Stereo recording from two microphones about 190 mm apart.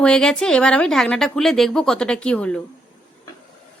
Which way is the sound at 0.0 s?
5° left (ahead or behind).